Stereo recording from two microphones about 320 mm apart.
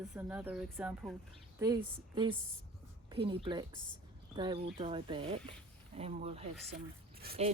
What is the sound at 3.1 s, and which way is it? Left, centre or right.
Speech, centre.